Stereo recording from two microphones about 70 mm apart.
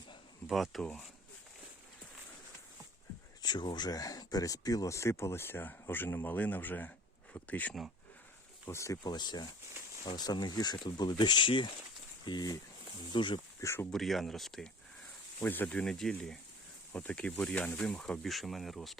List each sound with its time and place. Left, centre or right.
0.4 s speech: centre
0.8 s speech: centre
3.4 s speech: left
4.9 s speech: left
8.6 s speech: left
9.0 s speech: left
13.9 s speech: centre
15.4 s speech: left
15.6 s speech: centre
16.9 s speech: left; by 18.9 s centre